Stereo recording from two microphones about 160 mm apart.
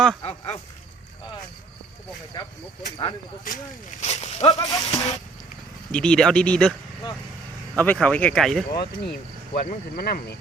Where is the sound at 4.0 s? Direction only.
40° left (ahead or behind).